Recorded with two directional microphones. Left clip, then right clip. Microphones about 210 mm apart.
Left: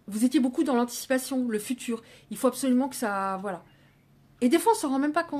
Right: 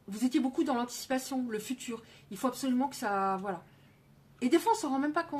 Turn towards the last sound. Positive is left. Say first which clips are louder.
# left 4 dB
turn(degrees=40)  # may be behind; listen again after turning